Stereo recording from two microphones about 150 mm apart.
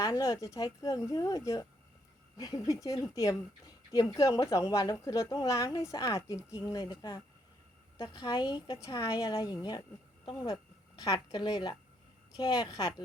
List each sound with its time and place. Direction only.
0.0 s a woman's voice: 20° left (ahead or behind)